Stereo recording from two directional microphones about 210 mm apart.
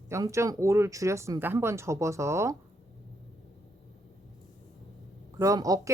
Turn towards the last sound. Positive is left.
turn(degrees=-15)  # may be behind; listen again after turning